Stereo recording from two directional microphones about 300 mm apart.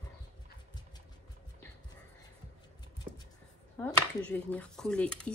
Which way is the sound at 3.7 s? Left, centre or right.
Centre.